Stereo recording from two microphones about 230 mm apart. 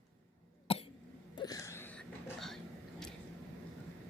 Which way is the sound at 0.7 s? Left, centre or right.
Left.